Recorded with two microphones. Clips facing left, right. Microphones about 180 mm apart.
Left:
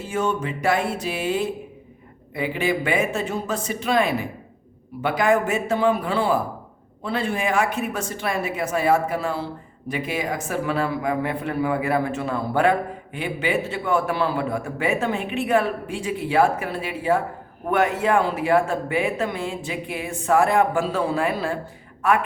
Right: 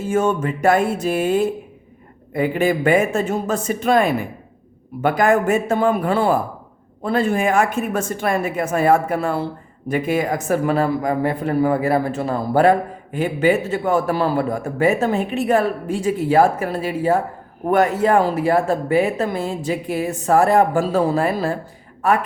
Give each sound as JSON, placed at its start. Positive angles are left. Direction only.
{"t": 0.0, "sound": "a woman's voice", "side_deg": -50}